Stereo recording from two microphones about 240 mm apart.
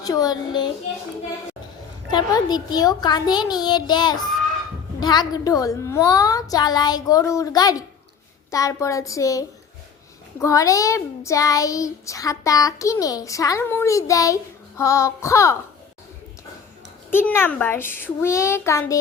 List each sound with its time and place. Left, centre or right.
0.0 s a child's voice: centre
2.0 s a child's voice: centre
17.1 s a child's voice: centre